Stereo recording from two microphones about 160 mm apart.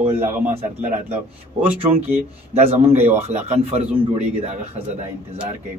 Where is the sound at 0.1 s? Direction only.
15° right (ahead or behind).